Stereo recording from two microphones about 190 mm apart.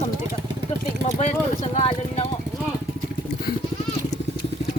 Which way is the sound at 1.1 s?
35° left (ahead or behind).